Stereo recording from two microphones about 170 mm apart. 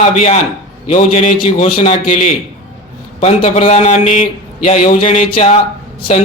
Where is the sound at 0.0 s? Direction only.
40° left (ahead or behind).